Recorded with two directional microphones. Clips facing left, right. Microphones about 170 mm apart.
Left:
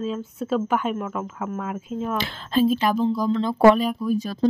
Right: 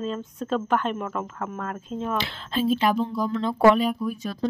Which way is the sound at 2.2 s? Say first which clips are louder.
Left 9 dB; 45° left (ahead or behind).